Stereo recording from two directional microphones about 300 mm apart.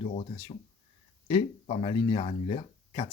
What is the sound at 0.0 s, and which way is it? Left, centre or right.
Speech, left.